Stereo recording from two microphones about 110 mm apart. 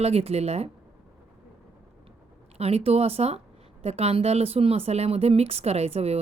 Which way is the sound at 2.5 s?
65° right (ahead or behind).